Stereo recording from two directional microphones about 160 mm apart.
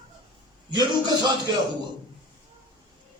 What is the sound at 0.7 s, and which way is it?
Speech, 25° right (ahead or behind).